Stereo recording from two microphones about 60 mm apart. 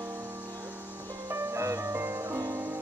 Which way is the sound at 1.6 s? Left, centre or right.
Right.